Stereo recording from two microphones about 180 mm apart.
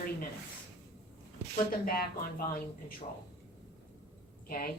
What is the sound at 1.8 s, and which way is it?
Speech, 55° left (ahead or behind).